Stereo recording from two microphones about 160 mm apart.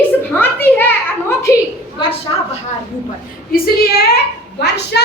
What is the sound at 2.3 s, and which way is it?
Speech, 30° left (ahead or behind).